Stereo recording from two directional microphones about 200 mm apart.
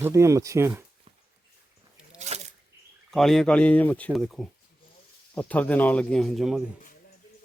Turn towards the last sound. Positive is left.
turn(degrees=0)  # may be behind; listen again after turning